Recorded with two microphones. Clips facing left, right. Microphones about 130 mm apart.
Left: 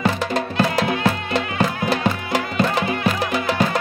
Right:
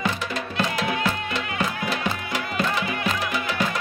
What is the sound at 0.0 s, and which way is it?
Music, 35° left (ahead or behind).